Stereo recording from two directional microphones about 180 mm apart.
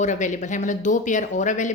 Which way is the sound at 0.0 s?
45° left (ahead or behind).